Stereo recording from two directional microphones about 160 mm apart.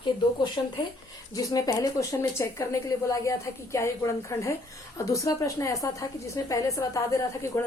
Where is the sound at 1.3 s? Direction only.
25° left (ahead or behind).